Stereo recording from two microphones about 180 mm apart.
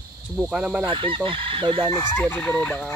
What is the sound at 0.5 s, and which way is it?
Cricket, 5° right (ahead or behind).